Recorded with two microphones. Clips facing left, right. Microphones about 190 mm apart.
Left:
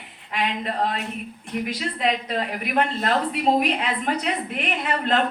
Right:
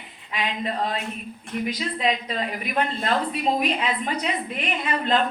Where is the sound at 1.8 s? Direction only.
65° left (ahead or behind).